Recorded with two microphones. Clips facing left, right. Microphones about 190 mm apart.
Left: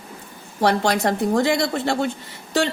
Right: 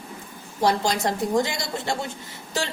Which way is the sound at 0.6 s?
65° left (ahead or behind).